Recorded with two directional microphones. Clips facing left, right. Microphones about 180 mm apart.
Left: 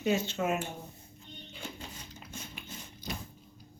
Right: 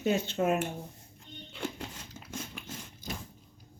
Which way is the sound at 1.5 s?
90° right.